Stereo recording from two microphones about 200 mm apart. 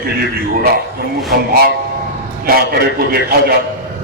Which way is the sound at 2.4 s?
50° right (ahead or behind).